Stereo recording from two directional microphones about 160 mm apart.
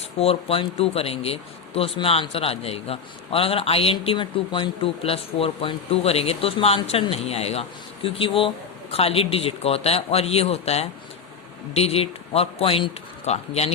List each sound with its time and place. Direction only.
0.2 s speech: 40° left (ahead or behind)